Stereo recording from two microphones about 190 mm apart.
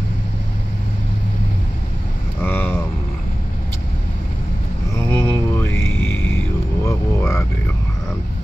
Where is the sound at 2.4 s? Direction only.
10° left (ahead or behind).